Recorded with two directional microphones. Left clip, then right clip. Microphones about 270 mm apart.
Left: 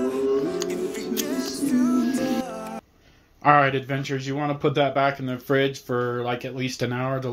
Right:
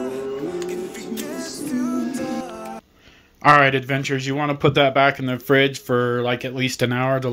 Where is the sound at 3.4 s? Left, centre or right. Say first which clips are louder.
Right 4 dB; right.